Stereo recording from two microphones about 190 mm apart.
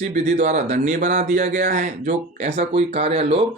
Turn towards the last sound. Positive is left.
turn(degrees=-30)  # may be behind; listen again after turning